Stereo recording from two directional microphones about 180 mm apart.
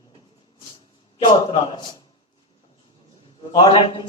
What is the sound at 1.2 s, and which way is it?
Speech, 25° left (ahead or behind).